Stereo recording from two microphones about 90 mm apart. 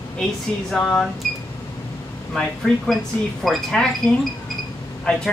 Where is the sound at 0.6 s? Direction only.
5° left (ahead or behind).